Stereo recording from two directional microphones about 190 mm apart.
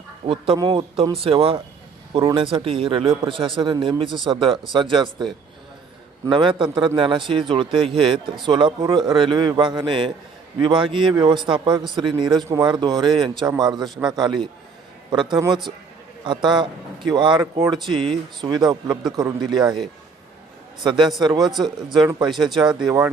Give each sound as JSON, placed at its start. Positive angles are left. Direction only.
{"t": 0.3, "sound": "speech", "side_deg": -25}
{"t": 6.2, "sound": "speech", "side_deg": -25}
{"t": 13.8, "sound": "speech", "side_deg": 0}
{"t": 14.1, "sound": "speech", "side_deg": -20}
{"t": 17.3, "sound": "speech", "side_deg": -10}
{"t": 20.8, "sound": "speech", "side_deg": -25}
{"t": 22.0, "sound": "speech", "side_deg": -5}